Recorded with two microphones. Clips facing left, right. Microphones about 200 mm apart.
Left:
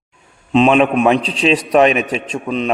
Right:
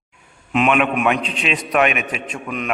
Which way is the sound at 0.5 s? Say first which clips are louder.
Left 6 dB; 30° left (ahead or behind).